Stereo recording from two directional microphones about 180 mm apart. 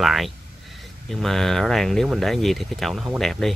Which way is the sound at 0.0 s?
Centre (ahead or behind).